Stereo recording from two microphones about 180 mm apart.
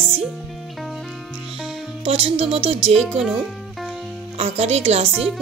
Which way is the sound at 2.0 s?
35° right (ahead or behind).